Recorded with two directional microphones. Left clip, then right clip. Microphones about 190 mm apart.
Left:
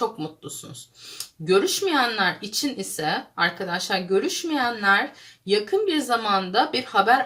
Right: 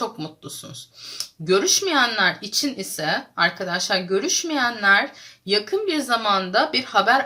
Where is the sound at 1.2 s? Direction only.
30° right (ahead or behind).